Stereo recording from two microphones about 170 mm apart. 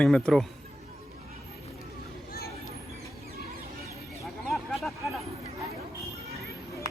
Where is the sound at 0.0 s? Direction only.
5° left (ahead or behind).